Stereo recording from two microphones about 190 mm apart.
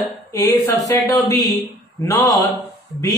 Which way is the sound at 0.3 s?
15° left (ahead or behind).